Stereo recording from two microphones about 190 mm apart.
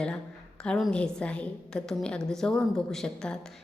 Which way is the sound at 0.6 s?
5° left (ahead or behind).